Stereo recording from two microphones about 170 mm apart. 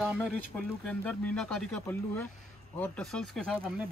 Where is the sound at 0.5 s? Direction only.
10° left (ahead or behind).